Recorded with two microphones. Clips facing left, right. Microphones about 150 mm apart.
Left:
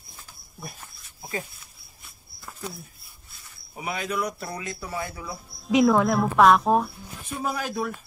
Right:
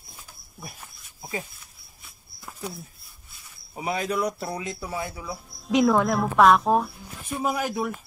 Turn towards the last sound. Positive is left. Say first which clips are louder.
# right 2 dB
turn(degrees=-15)  # may be behind; listen again after turning